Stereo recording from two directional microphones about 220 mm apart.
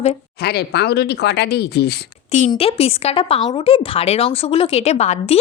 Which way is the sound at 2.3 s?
35° left (ahead or behind).